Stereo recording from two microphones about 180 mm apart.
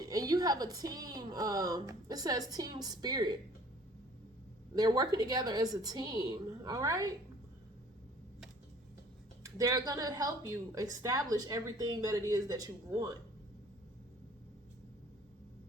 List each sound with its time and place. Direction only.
0.0 s a woman's voice: 20° right (ahead or behind)
4.7 s a woman's voice: 20° right (ahead or behind)
9.6 s a woman's voice: 20° right (ahead or behind)